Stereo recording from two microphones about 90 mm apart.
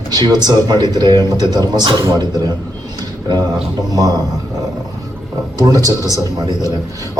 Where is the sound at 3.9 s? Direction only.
40° right (ahead or behind).